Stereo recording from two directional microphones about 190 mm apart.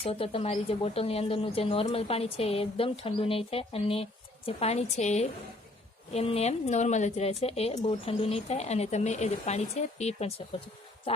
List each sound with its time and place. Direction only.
0.0 s speech: 30° left (ahead or behind)